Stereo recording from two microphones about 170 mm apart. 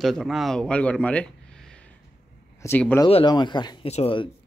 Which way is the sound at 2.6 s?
10° left (ahead or behind).